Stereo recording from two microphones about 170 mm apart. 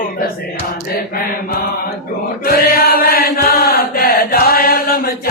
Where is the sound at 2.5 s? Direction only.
65° left (ahead or behind).